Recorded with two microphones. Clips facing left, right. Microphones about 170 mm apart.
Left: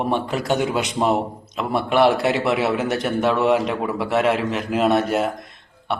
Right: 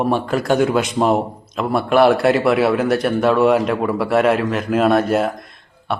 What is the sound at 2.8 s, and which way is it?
Speech, 20° left (ahead or behind).